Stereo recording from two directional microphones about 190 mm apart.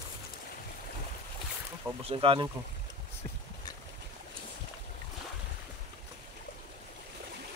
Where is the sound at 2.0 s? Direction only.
30° right (ahead or behind).